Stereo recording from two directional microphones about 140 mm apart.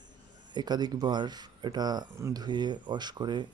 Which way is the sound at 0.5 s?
30° right (ahead or behind).